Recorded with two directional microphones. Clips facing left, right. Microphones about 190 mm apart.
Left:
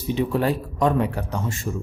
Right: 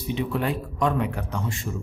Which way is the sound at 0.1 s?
40° left (ahead or behind).